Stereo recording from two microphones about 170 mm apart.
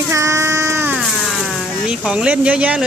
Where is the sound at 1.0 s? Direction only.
Centre (ahead or behind).